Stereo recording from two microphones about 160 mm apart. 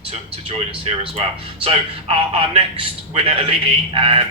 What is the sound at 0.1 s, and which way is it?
A man's voice, 35° right (ahead or behind).